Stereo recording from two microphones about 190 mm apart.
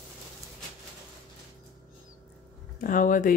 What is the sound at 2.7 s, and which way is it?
Speech, 45° left (ahead or behind).